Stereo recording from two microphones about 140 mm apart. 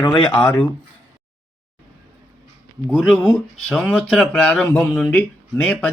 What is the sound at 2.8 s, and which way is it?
Speech, 5° left (ahead or behind).